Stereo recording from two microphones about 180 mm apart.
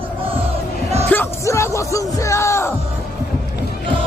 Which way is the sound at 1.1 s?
15° left (ahead or behind).